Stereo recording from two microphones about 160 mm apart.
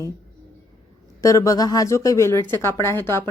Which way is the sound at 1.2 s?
20° left (ahead or behind).